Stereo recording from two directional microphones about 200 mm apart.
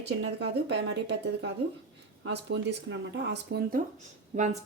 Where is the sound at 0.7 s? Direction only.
60° right (ahead or behind).